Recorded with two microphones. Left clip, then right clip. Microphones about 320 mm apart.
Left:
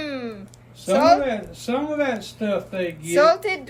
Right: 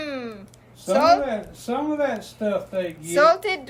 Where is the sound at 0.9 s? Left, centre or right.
Centre.